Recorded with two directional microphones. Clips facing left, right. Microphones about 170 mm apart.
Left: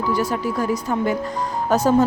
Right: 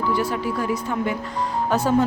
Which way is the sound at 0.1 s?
40° left (ahead or behind).